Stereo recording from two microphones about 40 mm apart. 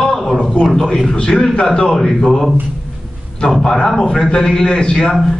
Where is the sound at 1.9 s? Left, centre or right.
Centre.